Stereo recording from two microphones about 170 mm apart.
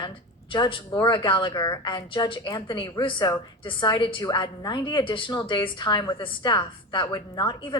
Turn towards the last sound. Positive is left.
turn(degrees=25)  # may be behind; listen again after turning